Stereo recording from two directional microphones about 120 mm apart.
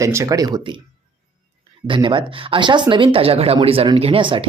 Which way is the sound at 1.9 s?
45° right (ahead or behind).